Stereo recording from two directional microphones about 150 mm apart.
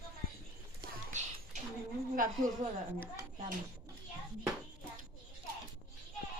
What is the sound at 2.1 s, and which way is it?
Speech, 65° right (ahead or behind).